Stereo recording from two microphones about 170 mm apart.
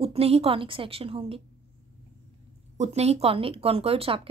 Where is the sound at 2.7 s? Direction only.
40° right (ahead or behind).